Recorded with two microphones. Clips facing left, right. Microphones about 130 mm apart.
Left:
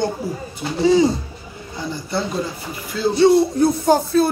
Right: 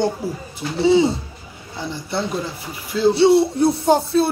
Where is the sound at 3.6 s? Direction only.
30° right (ahead or behind).